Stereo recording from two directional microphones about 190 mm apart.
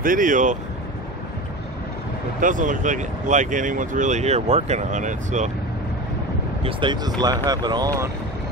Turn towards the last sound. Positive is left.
turn(degrees=-20)  # may be behind; listen again after turning